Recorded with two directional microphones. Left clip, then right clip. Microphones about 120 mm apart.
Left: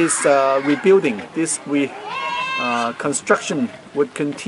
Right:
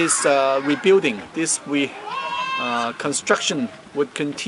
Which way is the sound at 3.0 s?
Centre (ahead or behind).